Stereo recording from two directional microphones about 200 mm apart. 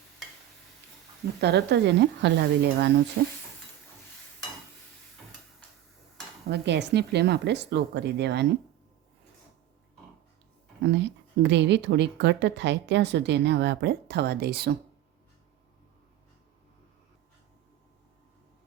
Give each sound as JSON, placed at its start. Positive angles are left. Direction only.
{"t": 1.4, "sound": "a woman's voice", "side_deg": -55}
{"t": 6.5, "sound": "a woman's voice", "side_deg": -60}
{"t": 10.9, "sound": "a woman's voice", "side_deg": -60}